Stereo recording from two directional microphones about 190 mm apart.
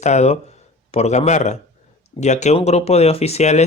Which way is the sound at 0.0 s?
35° left (ahead or behind).